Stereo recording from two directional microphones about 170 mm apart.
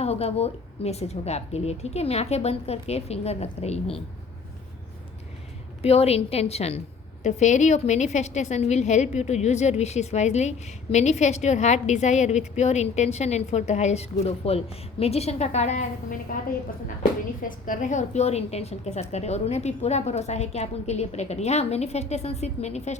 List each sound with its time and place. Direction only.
0.0 s a woman's voice: 40° left (ahead or behind)
5.8 s a woman's voice: 35° left (ahead or behind)
17.7 s a woman's voice: 50° left (ahead or behind)